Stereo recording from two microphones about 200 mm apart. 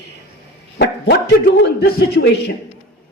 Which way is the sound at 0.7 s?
55° left (ahead or behind).